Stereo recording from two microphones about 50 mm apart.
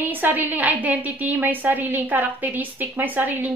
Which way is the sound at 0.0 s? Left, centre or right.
Right.